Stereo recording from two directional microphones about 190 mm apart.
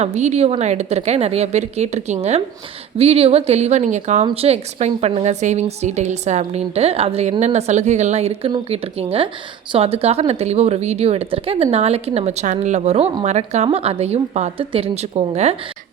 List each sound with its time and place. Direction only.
0.0 s speech: 35° right (ahead or behind)